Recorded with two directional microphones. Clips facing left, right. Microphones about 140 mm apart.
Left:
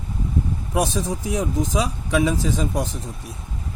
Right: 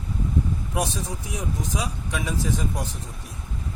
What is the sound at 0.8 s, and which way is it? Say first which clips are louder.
Speech: left 7 dB; 90° left.